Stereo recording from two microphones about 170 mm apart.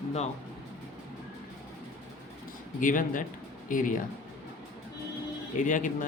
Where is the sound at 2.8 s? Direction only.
50° left (ahead or behind).